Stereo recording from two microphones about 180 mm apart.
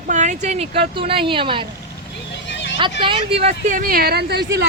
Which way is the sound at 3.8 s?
55° right (ahead or behind).